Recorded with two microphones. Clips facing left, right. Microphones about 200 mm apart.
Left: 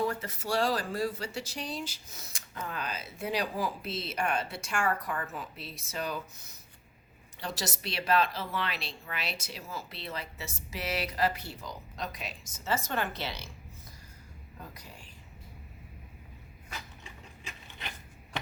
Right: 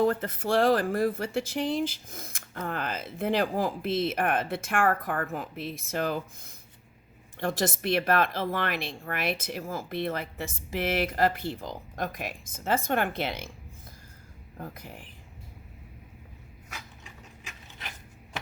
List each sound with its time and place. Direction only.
0.0 s speech: 55° right (ahead or behind)
14.6 s speech: 55° right (ahead or behind)